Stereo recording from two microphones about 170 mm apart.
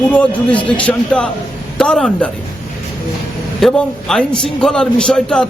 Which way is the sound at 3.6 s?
5° left (ahead or behind).